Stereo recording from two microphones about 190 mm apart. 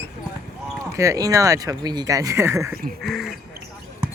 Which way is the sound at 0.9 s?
15° right (ahead or behind).